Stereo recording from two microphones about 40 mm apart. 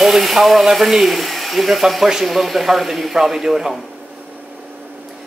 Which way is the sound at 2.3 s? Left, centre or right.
Centre.